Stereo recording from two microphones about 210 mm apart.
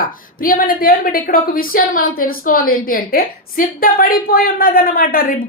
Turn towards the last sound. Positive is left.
turn(degrees=45)  # may be behind; listen again after turning